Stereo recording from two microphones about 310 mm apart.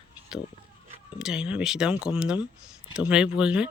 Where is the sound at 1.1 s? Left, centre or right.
Centre.